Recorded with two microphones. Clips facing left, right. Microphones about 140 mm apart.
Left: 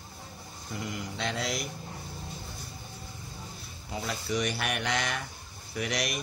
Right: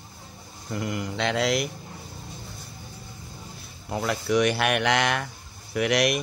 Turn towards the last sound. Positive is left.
turn(degrees=-65)  # may be behind; listen again after turning